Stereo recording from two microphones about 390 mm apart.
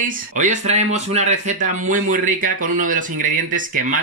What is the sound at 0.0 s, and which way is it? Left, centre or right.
Speech, centre.